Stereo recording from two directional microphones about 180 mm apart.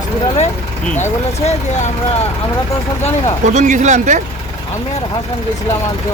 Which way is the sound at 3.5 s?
40° right (ahead or behind).